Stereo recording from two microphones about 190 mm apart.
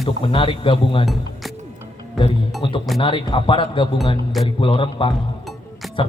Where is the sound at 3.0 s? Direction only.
25° left (ahead or behind).